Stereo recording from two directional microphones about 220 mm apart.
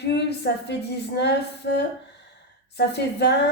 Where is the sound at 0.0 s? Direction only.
50° left (ahead or behind).